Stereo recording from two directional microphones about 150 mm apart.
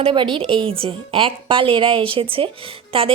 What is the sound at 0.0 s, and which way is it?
A woman's voice, 35° right (ahead or behind).